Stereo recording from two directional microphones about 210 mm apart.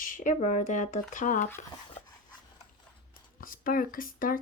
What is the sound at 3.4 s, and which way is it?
A woman's voice, 40° left (ahead or behind).